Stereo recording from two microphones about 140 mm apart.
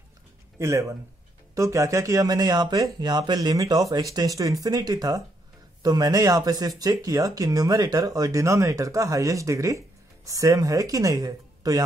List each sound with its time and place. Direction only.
0.6 s speech: 20° right (ahead or behind)